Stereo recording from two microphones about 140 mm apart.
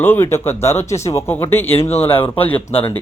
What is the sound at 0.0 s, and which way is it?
A man's voice, 15° left (ahead or behind).